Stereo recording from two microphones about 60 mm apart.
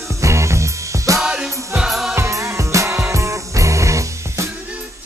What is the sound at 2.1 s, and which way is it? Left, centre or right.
Music, right.